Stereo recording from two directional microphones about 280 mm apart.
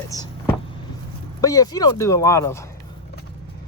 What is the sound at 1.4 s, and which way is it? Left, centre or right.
Speech, centre.